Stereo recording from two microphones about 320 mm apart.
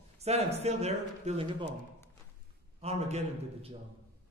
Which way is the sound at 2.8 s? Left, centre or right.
Centre.